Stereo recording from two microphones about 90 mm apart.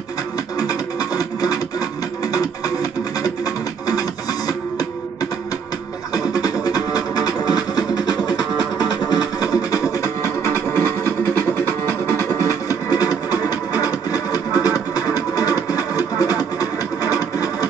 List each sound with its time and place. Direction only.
0.6 s music: 45° left (ahead or behind)
6.1 s music: 45° left (ahead or behind)
12.9 s music: 45° left (ahead or behind)